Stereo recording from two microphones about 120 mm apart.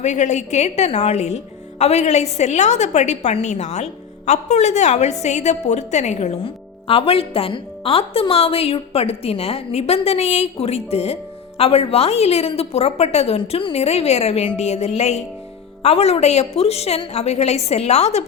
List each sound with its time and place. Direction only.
0.0 s a woman's voice: 80° left
6.4 s speech: 50° left (ahead or behind)